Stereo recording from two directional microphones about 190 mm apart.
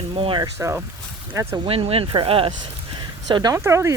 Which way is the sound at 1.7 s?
30° right (ahead or behind).